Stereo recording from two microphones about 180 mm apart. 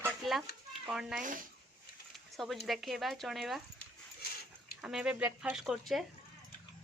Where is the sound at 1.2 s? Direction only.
45° right (ahead or behind).